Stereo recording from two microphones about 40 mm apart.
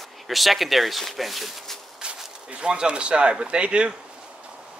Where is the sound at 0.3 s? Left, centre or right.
Centre.